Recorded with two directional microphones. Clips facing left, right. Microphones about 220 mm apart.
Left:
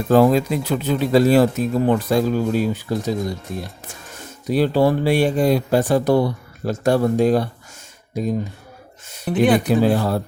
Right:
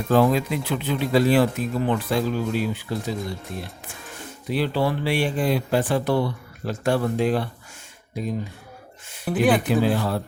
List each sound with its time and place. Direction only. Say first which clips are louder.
0.1 s speech: left 5 dB; 40° left (ahead or behind)
4.4 s speech: left 6 dB; 45° left (ahead or behind)
9.2 s speech: left 3 dB; centre (ahead or behind)
9.6 s speech: left 4 dB; 40° left (ahead or behind)